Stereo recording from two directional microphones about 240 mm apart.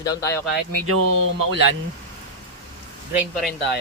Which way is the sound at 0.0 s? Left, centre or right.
Centre.